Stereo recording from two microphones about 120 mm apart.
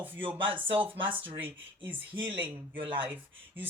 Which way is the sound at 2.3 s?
45° right (ahead or behind).